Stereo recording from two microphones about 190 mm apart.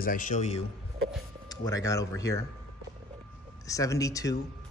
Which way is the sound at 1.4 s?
15° left (ahead or behind).